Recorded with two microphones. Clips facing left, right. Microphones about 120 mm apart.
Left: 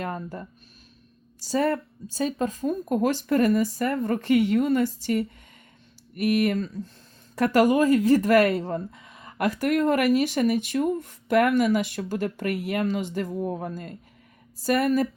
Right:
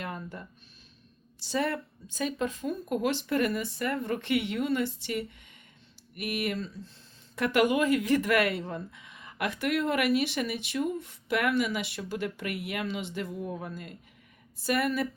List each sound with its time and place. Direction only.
0.0 s speech: 40° left (ahead or behind)